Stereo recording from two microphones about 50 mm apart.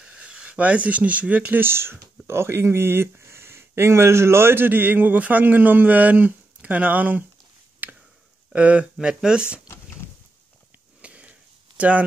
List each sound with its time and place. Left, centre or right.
0.0 s speech: right
1.5 s speech: right
7.8 s a sound: right
8.5 s speech: right
8.9 s speech: centre
11.0 s a sound: right